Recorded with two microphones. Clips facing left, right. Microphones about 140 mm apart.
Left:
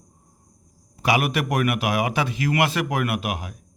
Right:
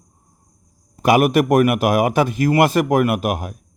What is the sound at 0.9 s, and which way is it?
A man's voice, 45° right (ahead or behind).